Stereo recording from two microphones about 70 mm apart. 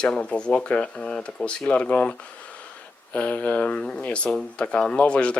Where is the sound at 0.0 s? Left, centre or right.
Centre.